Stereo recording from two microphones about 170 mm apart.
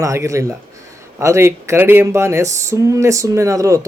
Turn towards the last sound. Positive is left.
turn(degrees=-20)  # may be behind; listen again after turning